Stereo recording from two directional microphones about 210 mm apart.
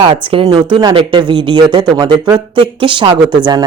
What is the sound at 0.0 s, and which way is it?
Speech, 25° right (ahead or behind).